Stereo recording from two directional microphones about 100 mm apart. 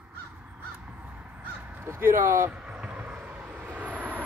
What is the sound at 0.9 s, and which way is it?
Caw, 15° right (ahead or behind).